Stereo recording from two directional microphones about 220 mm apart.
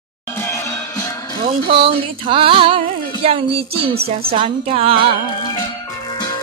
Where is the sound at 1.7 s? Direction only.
25° right (ahead or behind).